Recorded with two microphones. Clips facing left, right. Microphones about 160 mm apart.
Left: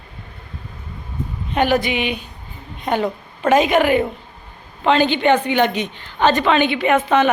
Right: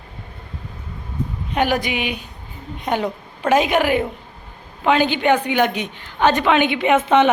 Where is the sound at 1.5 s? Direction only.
10° right (ahead or behind).